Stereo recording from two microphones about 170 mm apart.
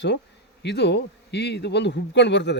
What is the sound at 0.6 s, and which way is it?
Speech, 80° left.